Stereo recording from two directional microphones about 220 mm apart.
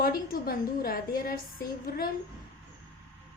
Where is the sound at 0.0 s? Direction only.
45° left (ahead or behind).